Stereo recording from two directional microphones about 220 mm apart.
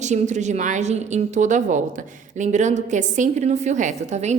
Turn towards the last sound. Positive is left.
turn(degrees=-30)  # may be behind; listen again after turning